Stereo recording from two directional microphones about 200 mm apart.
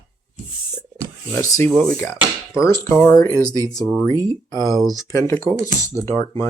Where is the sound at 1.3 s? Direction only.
15° left (ahead or behind).